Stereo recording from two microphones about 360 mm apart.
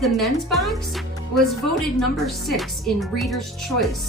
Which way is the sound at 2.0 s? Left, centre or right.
Centre.